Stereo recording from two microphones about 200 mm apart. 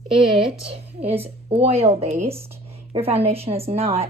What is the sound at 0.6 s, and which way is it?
A woman's voice, 30° right (ahead or behind).